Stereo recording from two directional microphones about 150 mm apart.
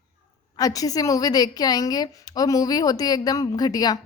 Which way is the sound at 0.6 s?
25° left (ahead or behind).